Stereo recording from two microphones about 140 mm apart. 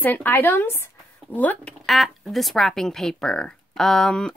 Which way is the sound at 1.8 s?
Centre (ahead or behind).